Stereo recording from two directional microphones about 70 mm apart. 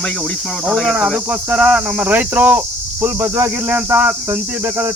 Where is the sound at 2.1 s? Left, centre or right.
Right.